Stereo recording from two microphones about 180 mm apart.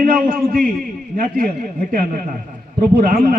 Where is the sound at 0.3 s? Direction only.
50° right (ahead or behind).